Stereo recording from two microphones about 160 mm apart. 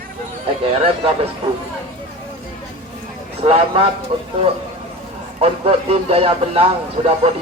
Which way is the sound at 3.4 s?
35° right (ahead or behind).